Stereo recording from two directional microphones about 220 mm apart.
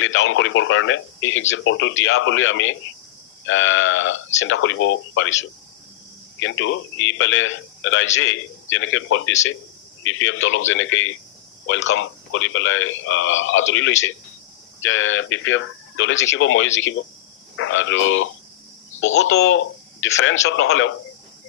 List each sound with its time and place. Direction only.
0.0 s speech: 60° left (ahead or behind)